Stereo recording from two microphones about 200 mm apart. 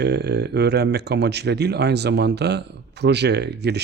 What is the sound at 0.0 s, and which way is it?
Speech, 55° right (ahead or behind).